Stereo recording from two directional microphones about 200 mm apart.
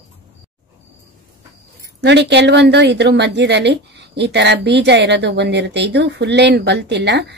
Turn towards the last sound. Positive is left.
turn(degrees=-55)  # may be behind; listen again after turning